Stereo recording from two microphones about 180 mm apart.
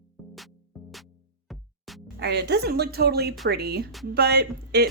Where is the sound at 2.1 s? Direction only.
65° right (ahead or behind).